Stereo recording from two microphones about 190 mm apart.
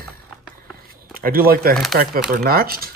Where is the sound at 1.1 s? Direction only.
50° right (ahead or behind).